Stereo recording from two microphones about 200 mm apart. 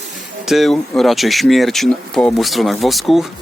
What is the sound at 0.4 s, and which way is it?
Speech, centre (ahead or behind).